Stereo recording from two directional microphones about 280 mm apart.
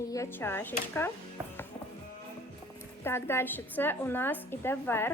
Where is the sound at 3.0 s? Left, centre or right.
Centre.